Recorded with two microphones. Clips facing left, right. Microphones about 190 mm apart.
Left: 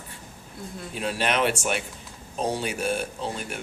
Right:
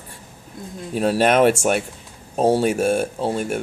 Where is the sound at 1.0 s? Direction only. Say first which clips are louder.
Right 9 dB; 40° right (ahead or behind).